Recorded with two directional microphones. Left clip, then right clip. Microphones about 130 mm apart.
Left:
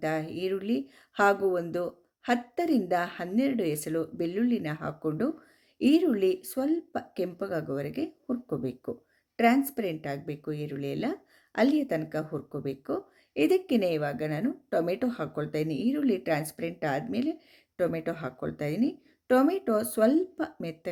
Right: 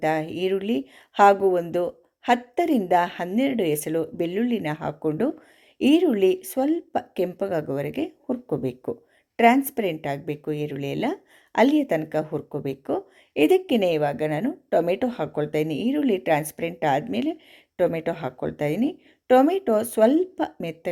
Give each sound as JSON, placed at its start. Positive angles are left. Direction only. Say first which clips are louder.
{"t": 0.0, "sound": "a woman's voice", "louder": "right 7 dB", "side_deg": -25}